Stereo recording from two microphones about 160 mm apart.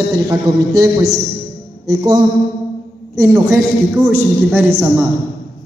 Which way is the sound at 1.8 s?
25° right (ahead or behind).